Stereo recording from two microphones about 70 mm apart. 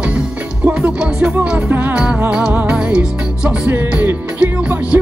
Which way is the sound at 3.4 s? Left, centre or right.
Right.